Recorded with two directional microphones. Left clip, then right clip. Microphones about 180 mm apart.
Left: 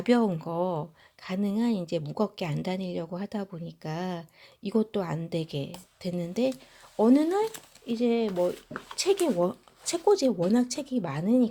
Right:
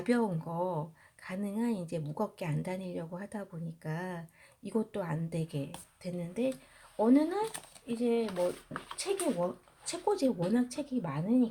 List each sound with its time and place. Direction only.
0.0 s speech: 30° left (ahead or behind); by 11.4 s 55° left (ahead or behind)